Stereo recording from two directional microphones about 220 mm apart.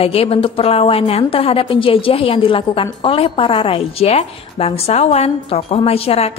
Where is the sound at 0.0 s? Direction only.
25° left (ahead or behind).